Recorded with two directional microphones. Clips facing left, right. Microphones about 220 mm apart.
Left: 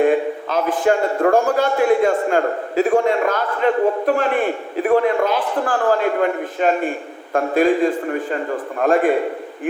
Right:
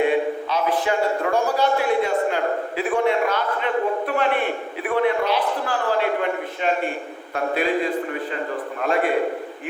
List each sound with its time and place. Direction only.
0.0 s a sound: 50° left (ahead or behind)
6.6 s a man's voice: 45° left (ahead or behind)
8.8 s a man's voice: 50° left (ahead or behind)